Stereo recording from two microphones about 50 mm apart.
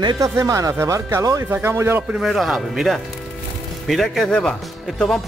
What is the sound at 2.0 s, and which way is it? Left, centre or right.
Speech, centre.